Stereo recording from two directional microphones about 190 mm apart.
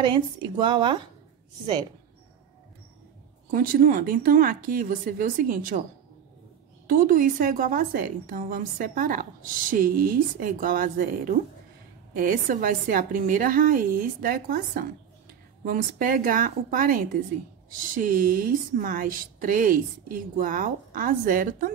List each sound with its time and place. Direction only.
0.0 s speech: 25° right (ahead or behind)
3.5 s a woman's voice: 50° right (ahead or behind)
6.9 s a woman's voice: 45° right (ahead or behind)